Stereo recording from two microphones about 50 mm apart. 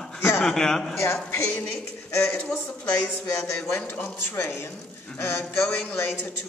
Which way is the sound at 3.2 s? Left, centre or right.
Left.